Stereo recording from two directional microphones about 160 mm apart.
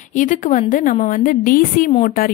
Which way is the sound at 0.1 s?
55° left (ahead or behind).